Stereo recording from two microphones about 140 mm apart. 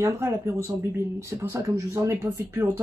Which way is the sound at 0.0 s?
20° right (ahead or behind).